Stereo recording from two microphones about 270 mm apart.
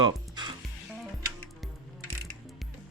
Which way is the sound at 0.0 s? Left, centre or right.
Centre.